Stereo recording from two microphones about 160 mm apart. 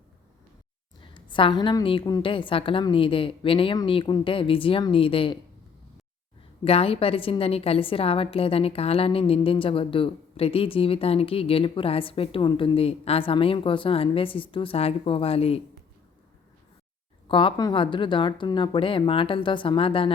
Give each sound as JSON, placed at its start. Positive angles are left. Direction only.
{"t": 1.0, "sound": "a woman's voice", "side_deg": 30}
{"t": 6.7, "sound": "a woman's voice", "side_deg": 35}
{"t": 17.2, "sound": "a woman's voice", "side_deg": 30}